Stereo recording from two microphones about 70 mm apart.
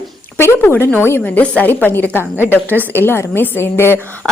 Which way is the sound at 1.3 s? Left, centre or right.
Left.